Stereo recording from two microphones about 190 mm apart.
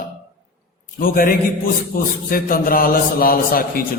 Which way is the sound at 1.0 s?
50° left (ahead or behind).